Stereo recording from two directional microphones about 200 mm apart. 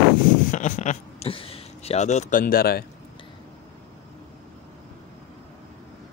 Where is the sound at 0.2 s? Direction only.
40° left (ahead or behind).